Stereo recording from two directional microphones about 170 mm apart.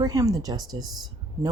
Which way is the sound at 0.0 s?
20° right (ahead or behind).